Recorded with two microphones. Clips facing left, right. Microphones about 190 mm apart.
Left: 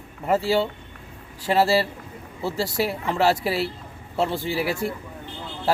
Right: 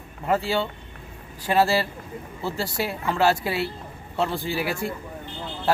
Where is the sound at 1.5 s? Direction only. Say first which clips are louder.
Left 1 dB; 30° left (ahead or behind).